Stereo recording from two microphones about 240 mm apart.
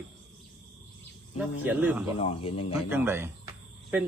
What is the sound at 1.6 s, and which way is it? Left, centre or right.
Speech, centre.